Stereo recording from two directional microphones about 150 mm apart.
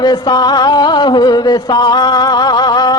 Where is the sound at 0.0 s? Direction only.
25° left (ahead or behind).